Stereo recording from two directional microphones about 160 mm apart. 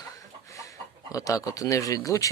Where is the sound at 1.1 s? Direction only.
20° left (ahead or behind).